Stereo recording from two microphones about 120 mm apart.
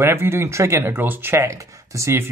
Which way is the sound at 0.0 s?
20° right (ahead or behind).